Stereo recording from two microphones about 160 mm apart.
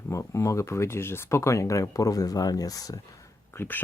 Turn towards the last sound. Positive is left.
turn(degrees=15)  # may be behind; listen again after turning